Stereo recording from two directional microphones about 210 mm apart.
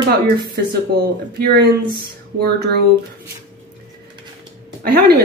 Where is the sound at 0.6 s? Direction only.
50° right (ahead or behind).